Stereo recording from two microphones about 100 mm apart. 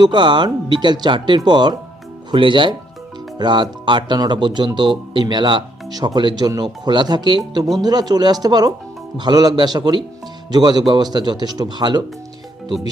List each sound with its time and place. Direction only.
0.0 s speech: 50° right (ahead or behind)